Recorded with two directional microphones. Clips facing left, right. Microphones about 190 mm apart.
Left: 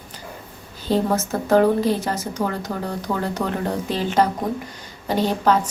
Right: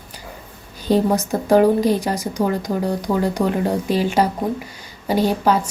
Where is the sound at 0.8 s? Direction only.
15° right (ahead or behind).